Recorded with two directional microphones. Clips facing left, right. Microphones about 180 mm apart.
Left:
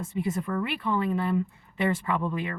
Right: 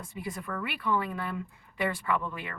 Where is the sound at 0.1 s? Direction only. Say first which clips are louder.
Left 7 dB; 25° left (ahead or behind).